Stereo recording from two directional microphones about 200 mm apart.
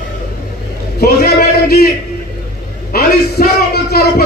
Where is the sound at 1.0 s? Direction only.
50° left (ahead or behind).